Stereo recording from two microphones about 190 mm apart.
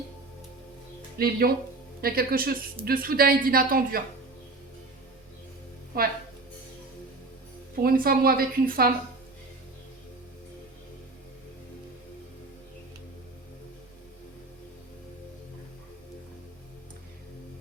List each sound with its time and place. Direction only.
1.2 s a woman's voice: 50° right (ahead or behind)
7.8 s a woman's voice: 50° right (ahead or behind)